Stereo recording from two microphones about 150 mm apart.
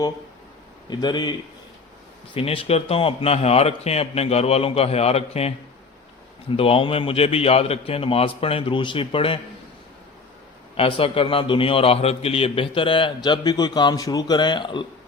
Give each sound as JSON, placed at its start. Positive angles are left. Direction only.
{"t": 0.9, "sound": "a man's voice", "side_deg": 30}
{"t": 6.6, "sound": "a man's voice", "side_deg": 40}
{"t": 10.8, "sound": "a man's voice", "side_deg": 40}